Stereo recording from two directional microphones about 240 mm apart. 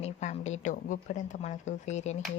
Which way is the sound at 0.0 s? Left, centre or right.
Left.